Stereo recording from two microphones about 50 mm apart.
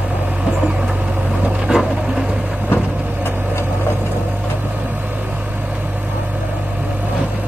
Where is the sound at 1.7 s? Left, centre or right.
Centre.